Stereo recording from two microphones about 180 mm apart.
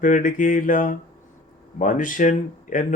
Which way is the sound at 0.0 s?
45° left (ahead or behind).